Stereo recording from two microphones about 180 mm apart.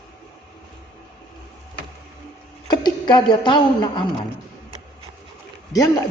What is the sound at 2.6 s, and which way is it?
A woman's voice, 25° left (ahead or behind).